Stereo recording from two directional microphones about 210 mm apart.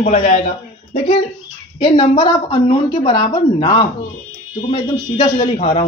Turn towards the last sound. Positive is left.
turn(degrees=30)  # may be behind; listen again after turning